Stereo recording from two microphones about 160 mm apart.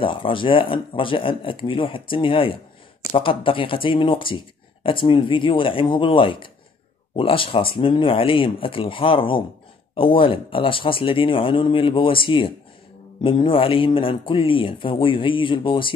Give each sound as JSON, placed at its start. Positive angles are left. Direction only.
{"t": 0.0, "sound": "speech", "side_deg": 35}